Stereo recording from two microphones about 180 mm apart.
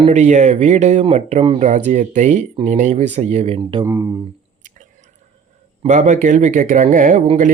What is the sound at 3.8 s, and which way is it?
Speech, 15° right (ahead or behind).